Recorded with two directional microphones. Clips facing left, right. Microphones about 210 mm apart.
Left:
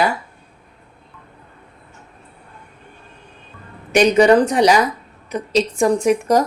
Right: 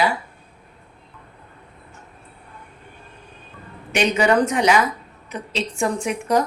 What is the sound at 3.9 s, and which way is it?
A woman's voice, 40° left (ahead or behind).